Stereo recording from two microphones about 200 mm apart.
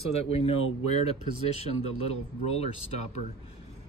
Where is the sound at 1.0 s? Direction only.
30° left (ahead or behind).